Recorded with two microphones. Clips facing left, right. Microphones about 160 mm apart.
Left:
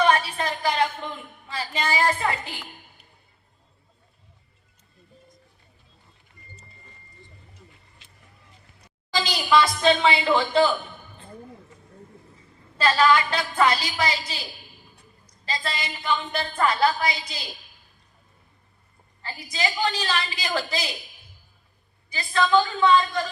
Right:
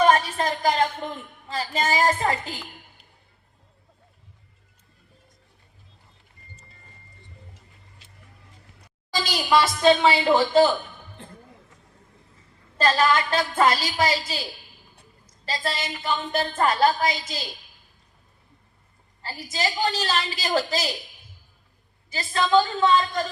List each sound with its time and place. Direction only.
0.0 s a woman's voice: 45° right (ahead or behind)
9.8 s a woman's voice: 40° right (ahead or behind)
12.7 s a woman's voice: 45° right (ahead or behind)
15.4 s a woman's voice: 45° right (ahead or behind)
19.2 s a woman's voice: 40° right (ahead or behind)
22.1 s a woman's voice: 40° right (ahead or behind)